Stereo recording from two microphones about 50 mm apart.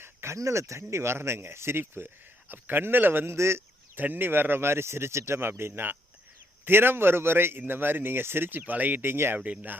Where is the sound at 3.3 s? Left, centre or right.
Right.